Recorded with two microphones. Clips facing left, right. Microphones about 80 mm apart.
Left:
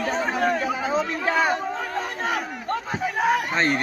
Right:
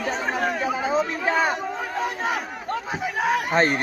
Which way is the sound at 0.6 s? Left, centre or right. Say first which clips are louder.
Right 1 dB; centre.